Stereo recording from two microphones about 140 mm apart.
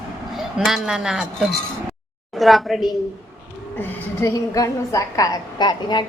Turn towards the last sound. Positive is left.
turn(degrees=30)  # may be behind; listen again after turning